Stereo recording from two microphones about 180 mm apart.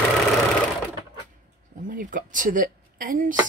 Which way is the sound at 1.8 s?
50° right (ahead or behind).